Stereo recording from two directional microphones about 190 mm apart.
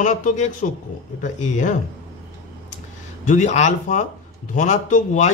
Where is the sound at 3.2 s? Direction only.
40° left (ahead or behind).